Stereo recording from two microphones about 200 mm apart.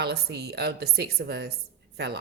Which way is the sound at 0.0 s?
55° right (ahead or behind).